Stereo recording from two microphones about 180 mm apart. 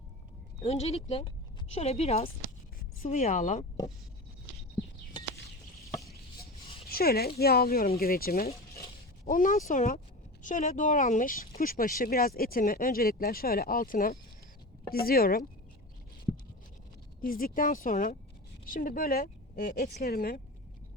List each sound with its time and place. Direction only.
0.6 s speech: 35° left (ahead or behind)
6.8 s speech: 60° left (ahead or behind)
17.2 s speech: 50° left (ahead or behind)